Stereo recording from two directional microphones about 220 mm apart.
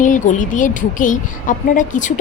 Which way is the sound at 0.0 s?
35° left (ahead or behind).